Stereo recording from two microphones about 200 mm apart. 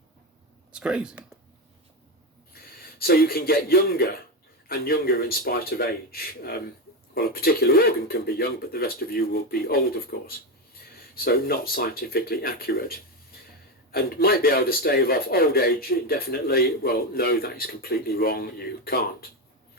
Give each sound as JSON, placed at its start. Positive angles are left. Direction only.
{"t": 0.7, "sound": "speech", "side_deg": -5}
{"t": 2.5, "sound": "a man's voice", "side_deg": 50}